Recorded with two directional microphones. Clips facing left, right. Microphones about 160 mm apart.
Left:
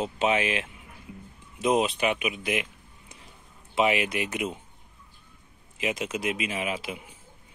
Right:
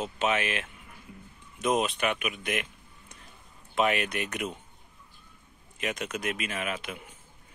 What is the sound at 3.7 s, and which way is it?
Speech, 20° left (ahead or behind).